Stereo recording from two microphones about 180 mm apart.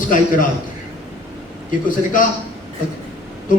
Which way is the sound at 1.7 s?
45° left (ahead or behind).